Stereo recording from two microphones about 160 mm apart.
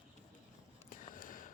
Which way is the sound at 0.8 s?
60° left (ahead or behind).